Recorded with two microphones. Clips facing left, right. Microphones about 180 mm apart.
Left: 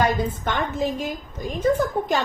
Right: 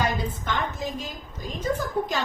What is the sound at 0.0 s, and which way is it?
A woman's voice, 60° left (ahead or behind).